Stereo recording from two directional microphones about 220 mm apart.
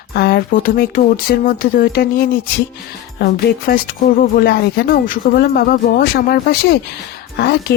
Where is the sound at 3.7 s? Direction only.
40° left (ahead or behind).